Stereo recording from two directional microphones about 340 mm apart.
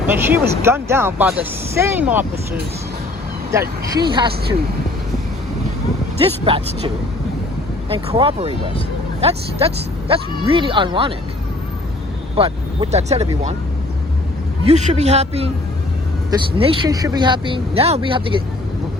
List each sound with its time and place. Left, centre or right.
0.0 s speech: centre
3.5 s speech: centre
4.3 s speech: right
6.2 s speech: centre
12.4 s speech: centre
14.7 s speech: centre